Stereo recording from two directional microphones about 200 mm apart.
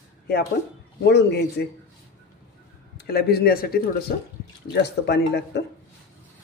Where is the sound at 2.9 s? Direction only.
50° left (ahead or behind).